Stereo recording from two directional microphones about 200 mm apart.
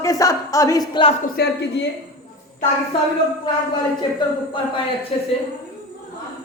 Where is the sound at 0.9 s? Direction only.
25° left (ahead or behind).